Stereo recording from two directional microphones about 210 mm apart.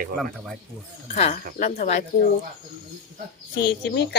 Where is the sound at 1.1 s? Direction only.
35° left (ahead or behind).